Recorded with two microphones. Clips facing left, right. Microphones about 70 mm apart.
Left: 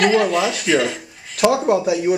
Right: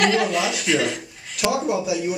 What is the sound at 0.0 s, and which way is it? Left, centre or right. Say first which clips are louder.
Speech: left 4 dB; centre.